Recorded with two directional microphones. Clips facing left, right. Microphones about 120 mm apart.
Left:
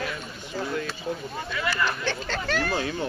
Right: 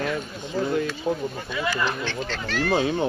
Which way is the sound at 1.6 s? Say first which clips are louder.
Right 2 dB; 20° right (ahead or behind).